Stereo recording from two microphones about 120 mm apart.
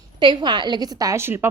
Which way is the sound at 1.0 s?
25° right (ahead or behind).